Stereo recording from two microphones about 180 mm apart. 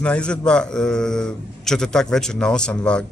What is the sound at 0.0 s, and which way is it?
Speech, 5° left (ahead or behind).